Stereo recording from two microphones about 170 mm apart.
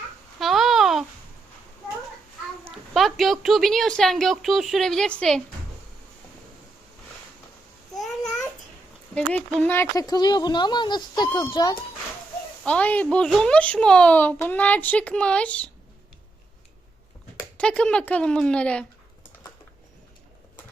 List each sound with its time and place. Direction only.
0.3 s babbling: centre (ahead or behind)
2.6 s a sound: centre (ahead or behind)
3.4 s a woman's voice: centre (ahead or behind)
7.9 s babbling: centre (ahead or behind)
9.1 s speech: 10° left (ahead or behind); by 11.8 s 30° left (ahead or behind)
12.6 s a child's voice: 5° left (ahead or behind)
17.6 s a child's voice: 5° left (ahead or behind)